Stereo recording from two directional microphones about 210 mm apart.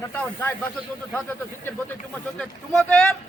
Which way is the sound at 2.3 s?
5° left (ahead or behind).